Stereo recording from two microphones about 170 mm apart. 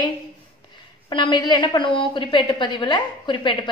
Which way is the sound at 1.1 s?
30° left (ahead or behind).